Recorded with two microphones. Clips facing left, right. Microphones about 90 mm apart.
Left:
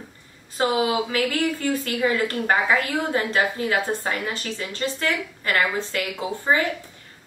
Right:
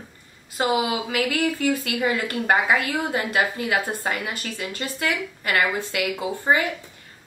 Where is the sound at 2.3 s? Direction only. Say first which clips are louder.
Even; 10° right (ahead or behind).